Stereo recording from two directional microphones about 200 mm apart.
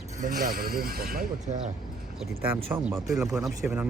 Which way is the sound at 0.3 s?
45° right (ahead or behind).